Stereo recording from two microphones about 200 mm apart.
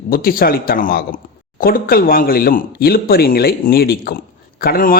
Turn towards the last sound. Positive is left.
turn(degrees=45)  # may be behind; listen again after turning